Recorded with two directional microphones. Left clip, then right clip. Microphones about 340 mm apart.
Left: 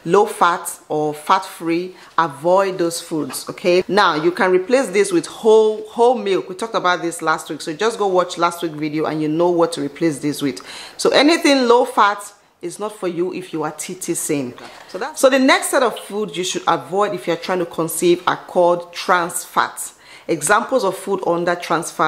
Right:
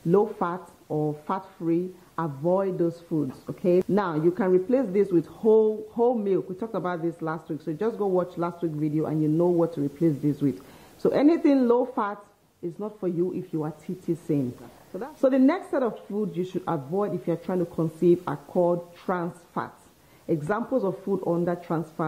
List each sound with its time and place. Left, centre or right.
0.1 s speech: centre
0.8 s speech: left
1.2 s speech: centre
5.4 s speech: left
6.0 s speech: centre
7.9 s speech: left
8.2 s speech: centre
9.4 s speech: centre
9.7 s speech: centre
21.5 s speech: centre